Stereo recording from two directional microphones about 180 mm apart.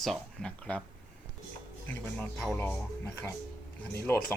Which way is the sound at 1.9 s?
10° left (ahead or behind).